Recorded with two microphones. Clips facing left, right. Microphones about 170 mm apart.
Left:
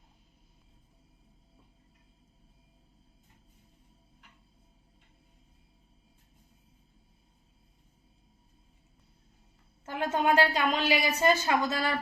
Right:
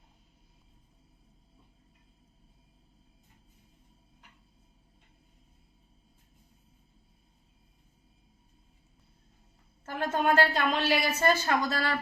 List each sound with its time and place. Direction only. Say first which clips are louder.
9.8 s a woman's voice: even; 15° left (ahead or behind)